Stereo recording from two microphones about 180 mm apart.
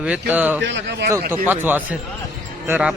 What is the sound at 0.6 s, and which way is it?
Speech, 75° right (ahead or behind).